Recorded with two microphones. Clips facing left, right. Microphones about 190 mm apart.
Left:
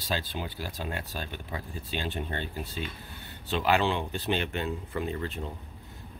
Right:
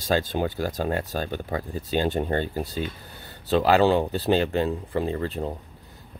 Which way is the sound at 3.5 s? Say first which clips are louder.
Right 8 dB; 35° right (ahead or behind).